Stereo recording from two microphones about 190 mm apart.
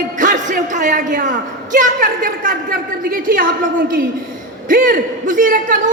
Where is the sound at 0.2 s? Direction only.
40° right (ahead or behind).